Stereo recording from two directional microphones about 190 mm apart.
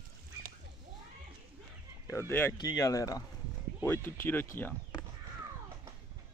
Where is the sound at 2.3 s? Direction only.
15° left (ahead or behind).